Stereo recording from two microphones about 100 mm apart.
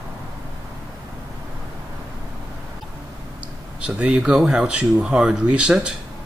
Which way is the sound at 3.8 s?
10° right (ahead or behind).